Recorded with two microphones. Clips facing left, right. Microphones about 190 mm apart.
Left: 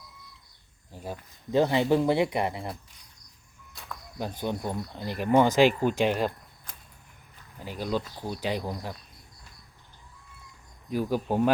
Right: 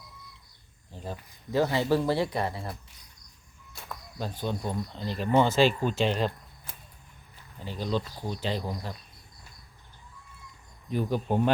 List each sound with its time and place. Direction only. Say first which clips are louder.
0.9 s speech: left 1 dB; 10° left (ahead or behind)
4.2 s speech: left 1 dB; 15° left (ahead or behind)
7.6 s speech: even; 10° left (ahead or behind)
10.8 s speech: left 1 dB; 5° left (ahead or behind)